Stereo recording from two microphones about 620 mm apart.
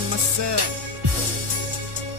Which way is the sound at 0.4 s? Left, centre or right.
Right.